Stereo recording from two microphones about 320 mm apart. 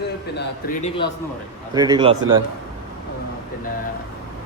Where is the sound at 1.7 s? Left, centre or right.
Centre.